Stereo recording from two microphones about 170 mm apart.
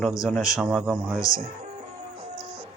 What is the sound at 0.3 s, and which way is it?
Speech, centre (ahead or behind).